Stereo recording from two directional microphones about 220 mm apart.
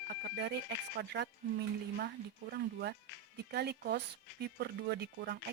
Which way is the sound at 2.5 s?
45° right (ahead or behind).